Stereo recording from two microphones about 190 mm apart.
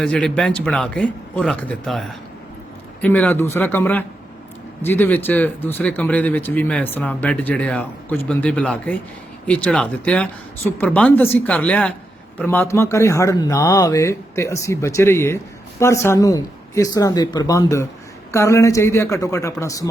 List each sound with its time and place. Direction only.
0.0 s speech: 5° left (ahead or behind)